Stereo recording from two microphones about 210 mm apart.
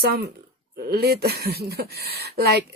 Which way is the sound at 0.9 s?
50° right (ahead or behind).